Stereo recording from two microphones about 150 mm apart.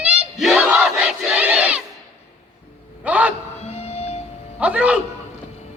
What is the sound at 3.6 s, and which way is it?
Music, 45° left (ahead or behind).